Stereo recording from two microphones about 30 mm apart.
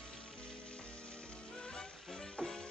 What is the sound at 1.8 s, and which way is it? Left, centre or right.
Music, left.